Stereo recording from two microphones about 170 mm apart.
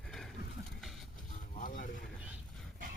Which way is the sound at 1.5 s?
50° left (ahead or behind).